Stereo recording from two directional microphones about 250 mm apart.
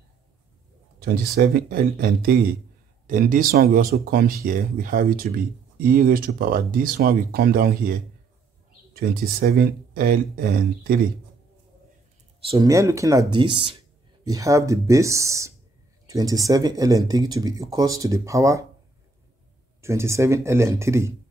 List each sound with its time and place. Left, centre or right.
0.9 s speech: right
12.4 s speech: centre
19.8 s speech: centre